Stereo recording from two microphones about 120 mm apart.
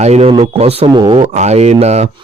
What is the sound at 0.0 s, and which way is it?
Speech, 65° right (ahead or behind).